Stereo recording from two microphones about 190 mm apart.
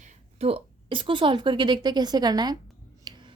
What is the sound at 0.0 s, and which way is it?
A woman's voice, 35° right (ahead or behind).